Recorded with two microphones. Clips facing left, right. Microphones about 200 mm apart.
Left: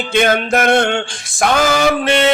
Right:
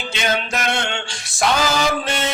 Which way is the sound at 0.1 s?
55° left (ahead or behind).